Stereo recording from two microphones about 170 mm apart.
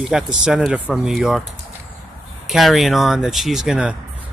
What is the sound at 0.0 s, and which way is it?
Speech, 5° right (ahead or behind).